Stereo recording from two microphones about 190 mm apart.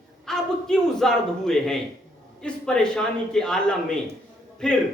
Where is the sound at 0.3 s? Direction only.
Centre (ahead or behind).